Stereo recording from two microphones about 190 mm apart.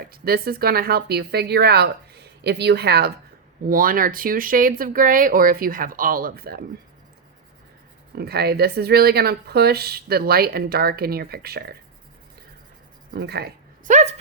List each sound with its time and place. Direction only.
0.0 s speech: 50° right (ahead or behind)
8.1 s speech: 55° right (ahead or behind)
13.1 s speech: 60° right (ahead or behind)